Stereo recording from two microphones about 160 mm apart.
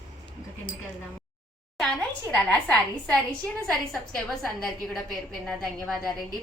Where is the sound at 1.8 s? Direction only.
5° left (ahead or behind).